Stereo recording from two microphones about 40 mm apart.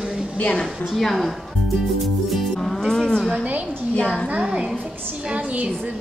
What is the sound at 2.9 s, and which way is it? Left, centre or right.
Speech, centre.